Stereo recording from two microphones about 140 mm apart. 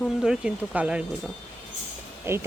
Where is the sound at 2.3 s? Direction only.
15° right (ahead or behind).